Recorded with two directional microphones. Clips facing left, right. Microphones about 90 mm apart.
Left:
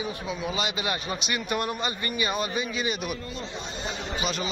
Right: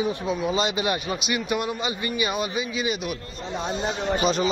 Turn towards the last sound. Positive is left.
turn(degrees=-55)  # may be behind; listen again after turning